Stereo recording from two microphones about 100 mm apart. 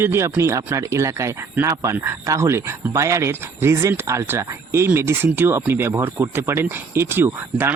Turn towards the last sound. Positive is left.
turn(degrees=-25)  # may be behind; listen again after turning